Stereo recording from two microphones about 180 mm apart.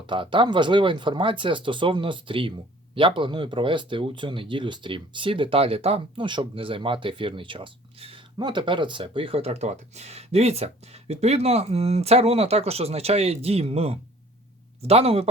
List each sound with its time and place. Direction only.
0.1 s speech: 25° right (ahead or behind)